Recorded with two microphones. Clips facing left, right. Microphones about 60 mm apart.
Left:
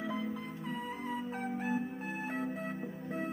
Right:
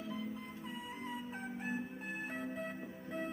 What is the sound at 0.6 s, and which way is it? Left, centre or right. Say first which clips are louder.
Music: left 6 dB; left.